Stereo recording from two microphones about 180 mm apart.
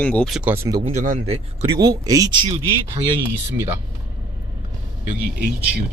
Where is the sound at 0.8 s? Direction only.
45° right (ahead or behind); by 2.6 s 25° right (ahead or behind).